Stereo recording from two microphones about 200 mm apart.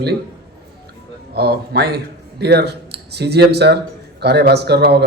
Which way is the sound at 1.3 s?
55° right (ahead or behind).